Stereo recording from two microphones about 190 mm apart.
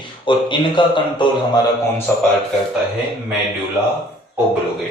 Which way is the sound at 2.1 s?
10° left (ahead or behind).